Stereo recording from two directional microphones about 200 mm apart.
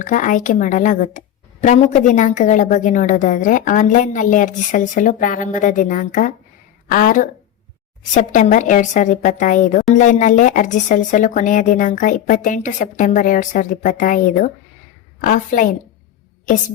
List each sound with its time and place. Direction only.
0.0 s a woman's voice: 40° left (ahead or behind)